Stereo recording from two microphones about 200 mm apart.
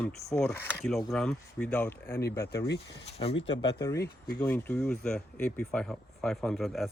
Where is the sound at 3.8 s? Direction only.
15° left (ahead or behind).